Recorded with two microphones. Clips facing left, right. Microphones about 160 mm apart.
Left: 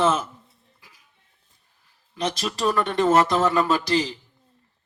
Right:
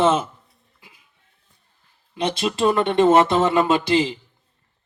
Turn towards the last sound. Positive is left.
turn(degrees=-25)  # may be behind; listen again after turning